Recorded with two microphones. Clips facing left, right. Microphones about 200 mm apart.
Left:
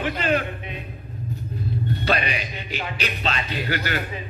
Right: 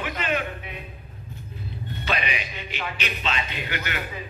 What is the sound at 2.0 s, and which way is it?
Music, 40° left (ahead or behind).